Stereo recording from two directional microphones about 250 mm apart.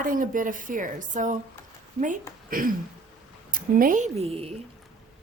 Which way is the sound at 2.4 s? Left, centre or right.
Right.